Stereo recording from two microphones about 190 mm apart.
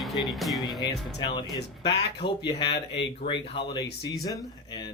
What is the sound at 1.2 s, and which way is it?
Speech, 25° left (ahead or behind).